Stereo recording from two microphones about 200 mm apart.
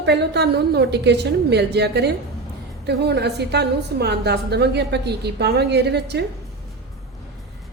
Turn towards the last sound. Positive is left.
turn(degrees=-55)  # may be behind; listen again after turning